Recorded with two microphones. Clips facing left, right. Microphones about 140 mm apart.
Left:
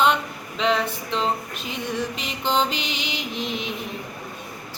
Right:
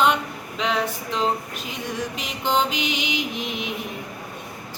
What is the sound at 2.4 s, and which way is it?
Mantra, 10° right (ahead or behind).